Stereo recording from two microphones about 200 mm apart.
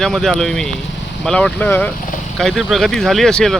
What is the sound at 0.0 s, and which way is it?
Speech, centre (ahead or behind).